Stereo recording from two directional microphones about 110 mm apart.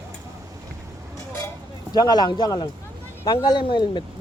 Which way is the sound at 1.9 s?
40° left (ahead or behind).